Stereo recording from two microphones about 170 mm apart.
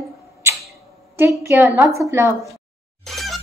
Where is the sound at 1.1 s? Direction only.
15° right (ahead or behind).